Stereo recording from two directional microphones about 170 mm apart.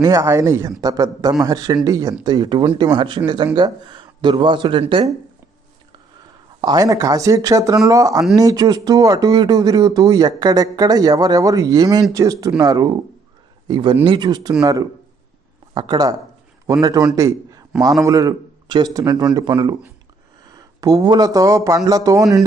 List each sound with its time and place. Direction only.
0.0 s speech: 20° right (ahead or behind)
6.6 s a man's voice: 25° right (ahead or behind)